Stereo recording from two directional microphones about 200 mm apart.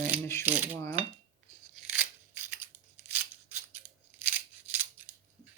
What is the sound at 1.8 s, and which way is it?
Tearing, 10° right (ahead or behind).